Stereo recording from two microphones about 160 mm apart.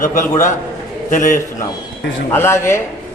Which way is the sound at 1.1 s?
55° left (ahead or behind).